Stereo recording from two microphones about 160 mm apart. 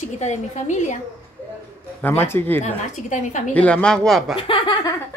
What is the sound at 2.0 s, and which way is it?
A man's voice, 15° left (ahead or behind).